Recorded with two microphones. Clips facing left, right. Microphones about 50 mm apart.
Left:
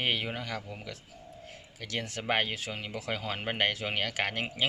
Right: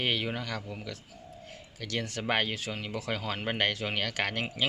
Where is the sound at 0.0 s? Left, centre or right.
Centre.